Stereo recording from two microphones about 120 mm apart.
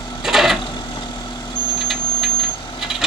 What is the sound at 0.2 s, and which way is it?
Sewing machine, 5° right (ahead or behind).